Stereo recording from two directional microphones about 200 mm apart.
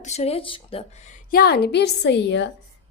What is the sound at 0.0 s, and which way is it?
Speech, 35° left (ahead or behind).